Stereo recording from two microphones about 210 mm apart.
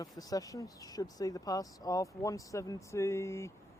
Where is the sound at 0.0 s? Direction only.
15° left (ahead or behind).